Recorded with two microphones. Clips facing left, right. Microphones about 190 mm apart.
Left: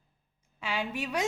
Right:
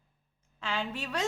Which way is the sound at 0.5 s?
10° left (ahead or behind).